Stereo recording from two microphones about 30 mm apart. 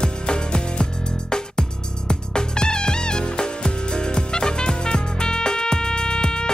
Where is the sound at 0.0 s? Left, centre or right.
Left.